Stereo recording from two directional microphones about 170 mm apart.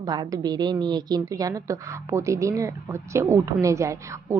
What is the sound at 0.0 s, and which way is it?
A woman's voice, 25° right (ahead or behind).